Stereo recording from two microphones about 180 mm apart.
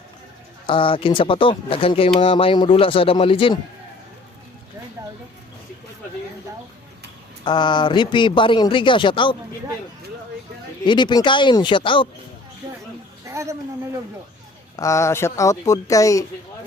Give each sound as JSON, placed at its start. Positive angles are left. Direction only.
{"t": 0.7, "sound": "speech", "side_deg": 30}
{"t": 7.4, "sound": "speech", "side_deg": 25}
{"t": 10.8, "sound": "speech", "side_deg": 25}
{"t": 13.2, "sound": "a sound", "side_deg": -15}
{"t": 14.8, "sound": "speech", "side_deg": 15}